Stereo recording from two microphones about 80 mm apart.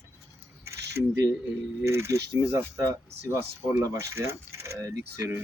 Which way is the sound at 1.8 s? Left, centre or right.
Right.